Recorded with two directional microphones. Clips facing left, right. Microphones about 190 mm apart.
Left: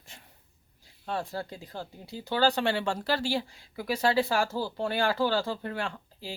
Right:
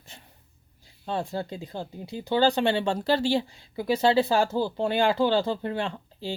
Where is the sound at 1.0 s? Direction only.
25° right (ahead or behind).